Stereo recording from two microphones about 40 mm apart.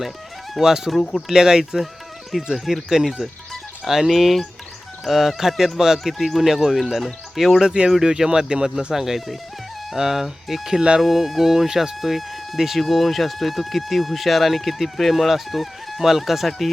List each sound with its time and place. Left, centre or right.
0.6 s speech: centre
1.3 s speech: centre
2.3 s speech: centre
7.6 s speech: right
7.9 s speech: centre
11.0 s speech: centre